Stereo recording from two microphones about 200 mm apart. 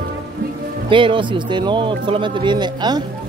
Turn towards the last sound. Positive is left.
turn(degrees=-20)  # may be behind; listen again after turning